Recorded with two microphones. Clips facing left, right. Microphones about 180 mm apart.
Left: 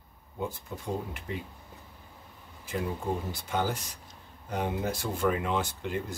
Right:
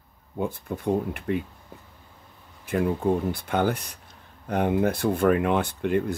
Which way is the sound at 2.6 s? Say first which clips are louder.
Right 9 dB; 60° right (ahead or behind).